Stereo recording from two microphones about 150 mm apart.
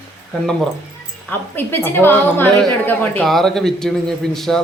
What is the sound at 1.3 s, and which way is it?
A woman's voice, 15° left (ahead or behind).